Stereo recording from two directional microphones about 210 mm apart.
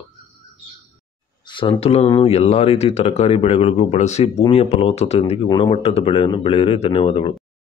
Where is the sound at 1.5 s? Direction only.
25° left (ahead or behind).